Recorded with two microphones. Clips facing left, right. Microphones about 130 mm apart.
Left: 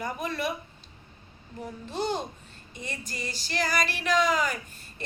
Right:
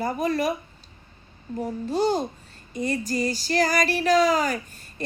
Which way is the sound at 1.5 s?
40° right (ahead or behind).